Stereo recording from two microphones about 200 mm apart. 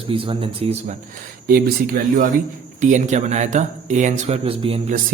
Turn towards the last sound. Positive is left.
turn(degrees=-30)  # may be behind; listen again after turning